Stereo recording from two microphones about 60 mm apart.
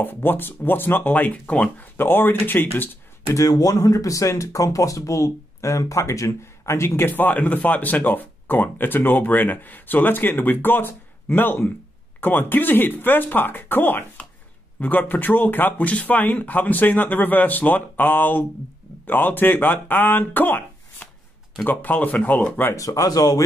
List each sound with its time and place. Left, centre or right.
0.0 s speech: left
3.3 s speech: left
7.1 s speech: left
21.6 s speech: left
22.8 s speech: left